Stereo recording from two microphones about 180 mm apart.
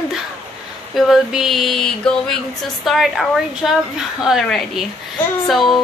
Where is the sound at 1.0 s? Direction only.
Centre (ahead or behind).